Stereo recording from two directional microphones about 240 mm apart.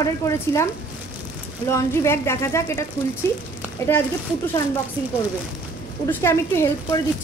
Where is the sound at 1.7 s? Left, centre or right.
Centre.